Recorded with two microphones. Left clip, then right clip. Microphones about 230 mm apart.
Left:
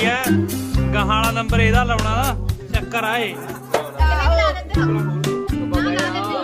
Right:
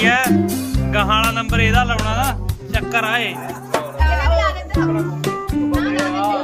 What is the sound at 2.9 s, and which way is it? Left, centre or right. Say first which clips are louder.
Music: right 2 dB; centre.